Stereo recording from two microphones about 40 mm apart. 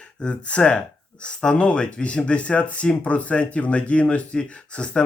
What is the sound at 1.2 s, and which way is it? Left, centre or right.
Speech, centre.